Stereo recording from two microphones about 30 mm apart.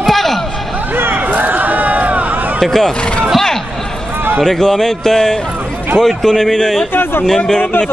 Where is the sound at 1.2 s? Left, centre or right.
Right.